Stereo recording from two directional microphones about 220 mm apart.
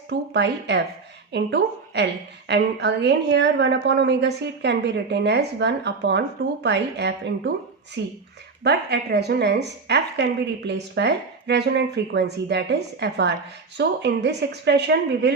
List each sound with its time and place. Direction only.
0.1 s a woman's voice: 50° right (ahead or behind)